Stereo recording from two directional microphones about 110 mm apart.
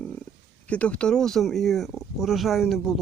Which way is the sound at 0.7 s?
10° left (ahead or behind).